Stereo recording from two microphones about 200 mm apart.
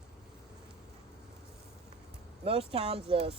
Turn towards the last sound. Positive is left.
turn(degrees=-30)  # may be behind; listen again after turning